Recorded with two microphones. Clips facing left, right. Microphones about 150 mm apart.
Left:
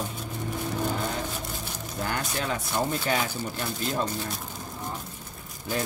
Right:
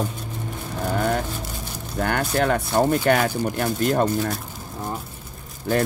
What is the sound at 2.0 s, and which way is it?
Speech, 65° right (ahead or behind).